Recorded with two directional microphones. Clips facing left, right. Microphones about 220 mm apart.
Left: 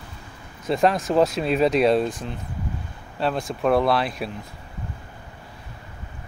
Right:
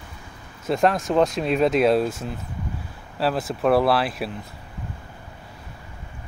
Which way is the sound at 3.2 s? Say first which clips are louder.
Right 1 dB; 5° right (ahead or behind).